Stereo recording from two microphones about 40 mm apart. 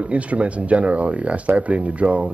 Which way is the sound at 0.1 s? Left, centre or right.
Right.